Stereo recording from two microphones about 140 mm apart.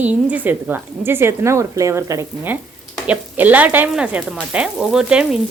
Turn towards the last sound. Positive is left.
turn(degrees=-5)  # may be behind; listen again after turning